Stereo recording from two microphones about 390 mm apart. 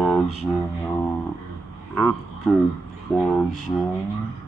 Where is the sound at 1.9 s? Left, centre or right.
Centre.